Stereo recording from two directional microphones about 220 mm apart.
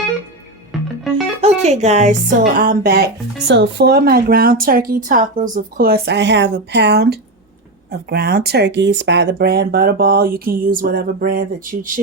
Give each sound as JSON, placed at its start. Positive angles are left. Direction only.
{"t": 1.4, "sound": "speech", "side_deg": -30}